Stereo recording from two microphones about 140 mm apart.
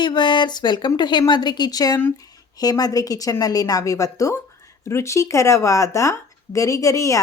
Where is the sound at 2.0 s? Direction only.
15° left (ahead or behind).